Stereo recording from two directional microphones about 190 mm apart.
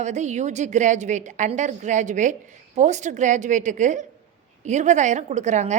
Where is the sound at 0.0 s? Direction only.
40° right (ahead or behind).